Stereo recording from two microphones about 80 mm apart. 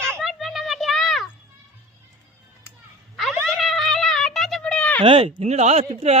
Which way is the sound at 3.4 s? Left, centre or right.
Centre.